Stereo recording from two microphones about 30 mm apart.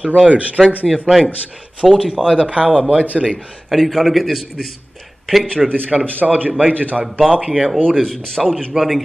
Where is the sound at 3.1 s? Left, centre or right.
Centre.